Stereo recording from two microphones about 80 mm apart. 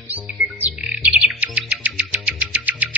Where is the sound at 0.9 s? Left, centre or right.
Centre.